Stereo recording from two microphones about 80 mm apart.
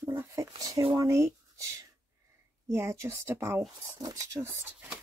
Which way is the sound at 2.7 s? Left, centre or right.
Right.